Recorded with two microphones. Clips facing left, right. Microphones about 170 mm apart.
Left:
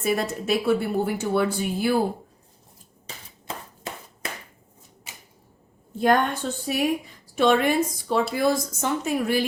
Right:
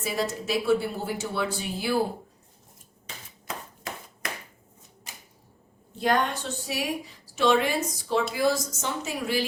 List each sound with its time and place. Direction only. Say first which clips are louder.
0.0 s speech: left 4 dB; 55° left (ahead or behind)
3.4 s clapping: left 2 dB; 30° left (ahead or behind)
6.0 s a woman's voice: left 4 dB; 50° left (ahead or behind)